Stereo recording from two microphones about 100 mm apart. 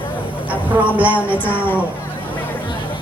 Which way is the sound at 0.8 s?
15° right (ahead or behind).